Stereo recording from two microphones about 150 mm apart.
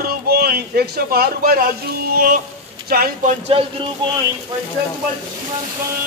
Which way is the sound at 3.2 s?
40° right (ahead or behind).